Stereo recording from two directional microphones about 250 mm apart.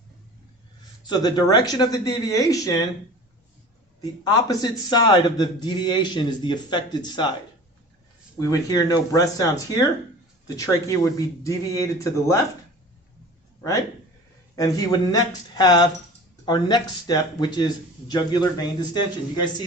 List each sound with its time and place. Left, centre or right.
1.0 s a man's voice: centre
4.2 s a man's voice: centre
8.4 s a man's voice: centre
14.5 s a man's voice: centre